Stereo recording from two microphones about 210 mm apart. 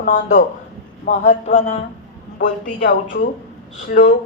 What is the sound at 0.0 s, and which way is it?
A man's voice, 40° left (ahead or behind).